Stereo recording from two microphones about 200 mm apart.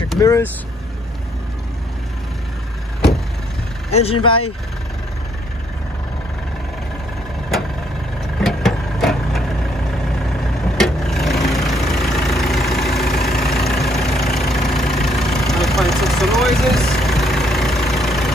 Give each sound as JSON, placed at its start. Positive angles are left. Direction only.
{"t": 0.2, "sound": "speech", "side_deg": 15}
{"t": 3.9, "sound": "speech", "side_deg": 30}
{"t": 8.4, "sound": "vehicle", "side_deg": 0}
{"t": 10.8, "sound": "vehicle", "side_deg": 0}